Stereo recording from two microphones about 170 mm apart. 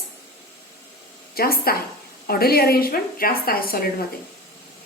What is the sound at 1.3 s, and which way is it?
A woman's voice, 60° left (ahead or behind).